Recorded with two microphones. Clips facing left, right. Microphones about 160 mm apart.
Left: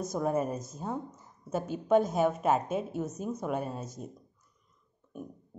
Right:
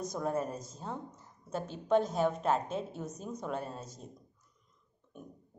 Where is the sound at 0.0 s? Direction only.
10° left (ahead or behind).